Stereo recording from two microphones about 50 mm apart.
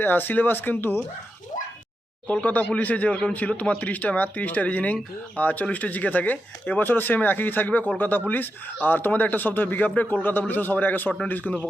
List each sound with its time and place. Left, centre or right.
0.0 s speech: left
2.2 s speech: left